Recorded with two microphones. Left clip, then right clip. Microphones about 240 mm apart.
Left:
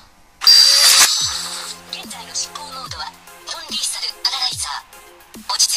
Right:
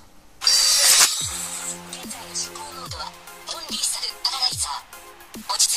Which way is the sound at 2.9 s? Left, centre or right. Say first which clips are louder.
Left 4 dB; centre.